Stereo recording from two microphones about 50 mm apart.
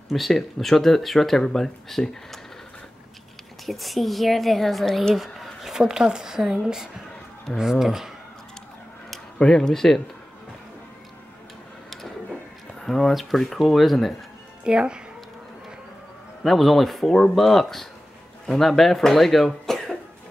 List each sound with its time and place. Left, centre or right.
0.1 s speech: centre
3.6 s speech: centre
9.4 s speech: centre
12.8 s speech: centre
14.6 s speech: centre
16.4 s speech: centre